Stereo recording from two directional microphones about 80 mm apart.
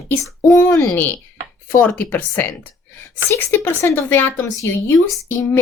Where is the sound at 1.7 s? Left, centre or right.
Left.